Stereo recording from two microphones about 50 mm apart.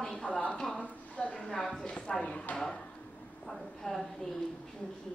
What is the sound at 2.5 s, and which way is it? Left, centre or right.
Speech, centre.